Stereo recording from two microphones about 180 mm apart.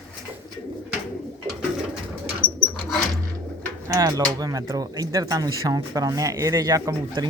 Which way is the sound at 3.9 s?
20° right (ahead or behind).